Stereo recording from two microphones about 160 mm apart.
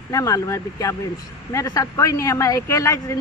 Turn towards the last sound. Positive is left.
turn(degrees=20)  # may be behind; listen again after turning